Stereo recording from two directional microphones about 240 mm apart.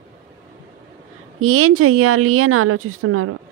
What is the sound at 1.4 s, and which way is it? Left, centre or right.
Speech, right.